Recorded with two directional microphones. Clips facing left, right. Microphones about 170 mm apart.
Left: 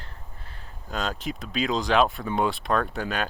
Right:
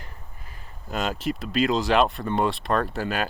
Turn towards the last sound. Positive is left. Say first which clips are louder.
# right 2 dB
turn(degrees=-5)  # may be behind; listen again after turning